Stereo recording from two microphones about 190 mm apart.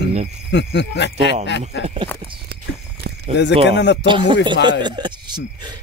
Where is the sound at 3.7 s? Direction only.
65° left (ahead or behind).